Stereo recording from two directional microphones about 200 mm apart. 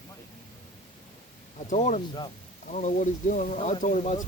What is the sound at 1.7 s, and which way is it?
Speech, 35° left (ahead or behind).